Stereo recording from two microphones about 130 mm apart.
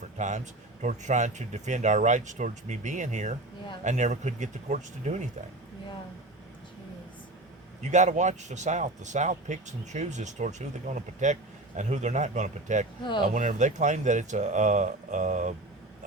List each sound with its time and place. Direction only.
0.2 s speech: 70° right (ahead or behind)
7.8 s speech: 65° right (ahead or behind)